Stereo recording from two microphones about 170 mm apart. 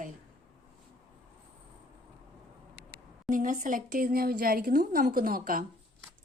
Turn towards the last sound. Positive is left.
turn(degrees=-55)  # may be behind; listen again after turning